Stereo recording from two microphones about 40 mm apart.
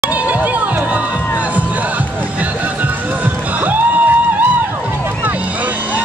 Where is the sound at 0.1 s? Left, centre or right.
Right.